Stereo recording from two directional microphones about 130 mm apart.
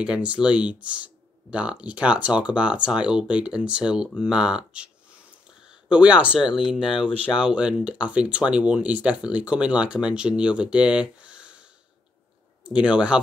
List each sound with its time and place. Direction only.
0.0 s speech: 10° right (ahead or behind)
5.9 s speech: 10° right (ahead or behind)
6.8 s speech: 40° left (ahead or behind)
7.3 s speech: 5° right (ahead or behind)
12.6 s speech: 10° right (ahead or behind)